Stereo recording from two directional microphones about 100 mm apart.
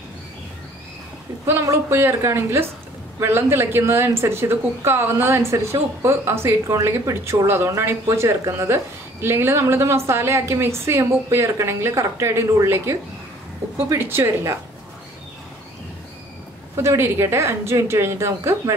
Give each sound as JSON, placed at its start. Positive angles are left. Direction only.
{"t": 1.5, "sound": "speech", "side_deg": -25}
{"t": 16.7, "sound": "speech", "side_deg": -25}